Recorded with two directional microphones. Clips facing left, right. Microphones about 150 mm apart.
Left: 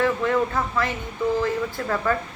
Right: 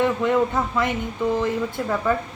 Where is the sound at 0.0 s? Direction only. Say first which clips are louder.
Right 2 dB; 15° right (ahead or behind).